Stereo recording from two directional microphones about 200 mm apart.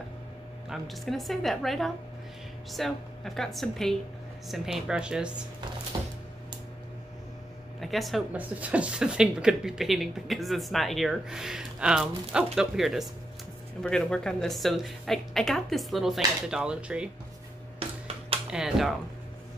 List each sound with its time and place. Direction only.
0.7 s a woman's voice: centre (ahead or behind)
5.9 s music: 20° right (ahead or behind)
7.8 s a woman's voice: centre (ahead or behind)
17.7 s a sound: 30° right (ahead or behind)
18.5 s a woman's voice: centre (ahead or behind)